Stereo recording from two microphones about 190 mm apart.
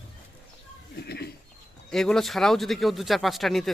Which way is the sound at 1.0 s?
55° left (ahead or behind).